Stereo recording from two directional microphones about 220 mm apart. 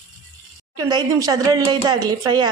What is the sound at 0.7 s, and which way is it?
Speech, 15° right (ahead or behind).